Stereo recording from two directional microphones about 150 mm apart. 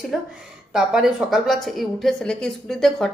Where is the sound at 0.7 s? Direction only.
5° right (ahead or behind).